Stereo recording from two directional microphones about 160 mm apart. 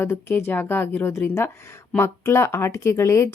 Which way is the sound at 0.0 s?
15° left (ahead or behind).